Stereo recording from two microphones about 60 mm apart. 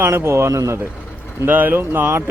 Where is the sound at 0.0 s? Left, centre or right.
Right.